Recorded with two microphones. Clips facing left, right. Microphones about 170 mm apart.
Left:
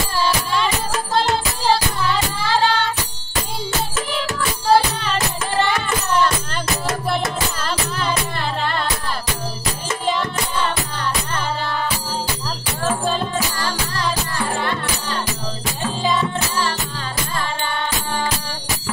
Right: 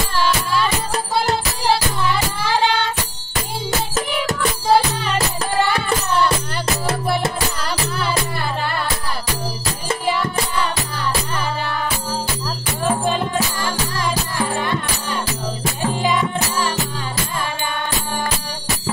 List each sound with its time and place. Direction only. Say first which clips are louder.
2.5 s music: even; 15° right (ahead or behind)
10.0 s music: even; 10° right (ahead or behind)
12.8 s music: right 2 dB; 15° right (ahead or behind)